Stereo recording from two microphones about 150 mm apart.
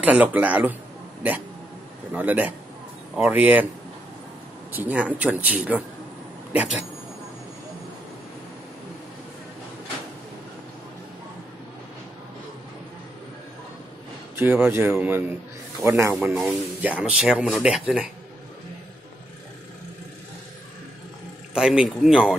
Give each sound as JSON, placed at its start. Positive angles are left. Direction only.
{"t": 0.0, "sound": "speech", "side_deg": -10}
{"t": 2.1, "sound": "speech", "side_deg": -10}
{"t": 4.7, "sound": "speech", "side_deg": -10}
{"t": 14.3, "sound": "a man's voice", "side_deg": -15}
{"t": 21.5, "sound": "speech", "side_deg": -5}